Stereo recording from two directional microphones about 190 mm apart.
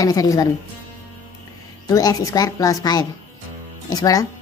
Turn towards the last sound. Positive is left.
turn(degrees=20)  # may be behind; listen again after turning